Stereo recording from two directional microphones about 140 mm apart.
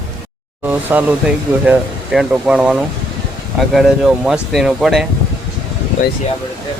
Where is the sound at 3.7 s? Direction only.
Centre (ahead or behind).